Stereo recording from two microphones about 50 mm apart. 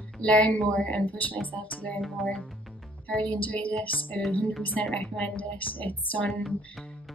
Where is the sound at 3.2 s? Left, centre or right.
Left.